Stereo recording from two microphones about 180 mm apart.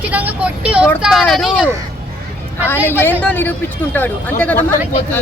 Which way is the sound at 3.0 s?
10° left (ahead or behind).